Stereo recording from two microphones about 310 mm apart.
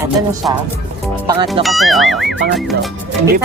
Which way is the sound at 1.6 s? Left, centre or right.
Centre.